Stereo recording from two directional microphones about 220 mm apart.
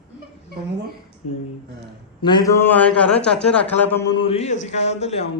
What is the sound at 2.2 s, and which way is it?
A man's voice, 20° left (ahead or behind).